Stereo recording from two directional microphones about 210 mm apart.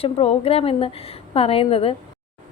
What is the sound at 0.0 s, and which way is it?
Speech, 30° left (ahead or behind).